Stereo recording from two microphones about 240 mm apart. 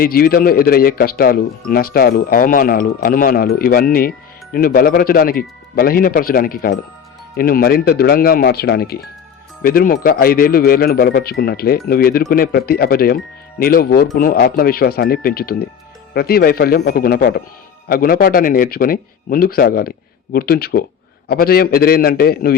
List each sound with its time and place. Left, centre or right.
0.0 s speech: left